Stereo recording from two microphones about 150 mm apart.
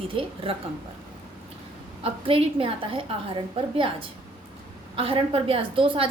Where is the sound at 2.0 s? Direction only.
40° right (ahead or behind).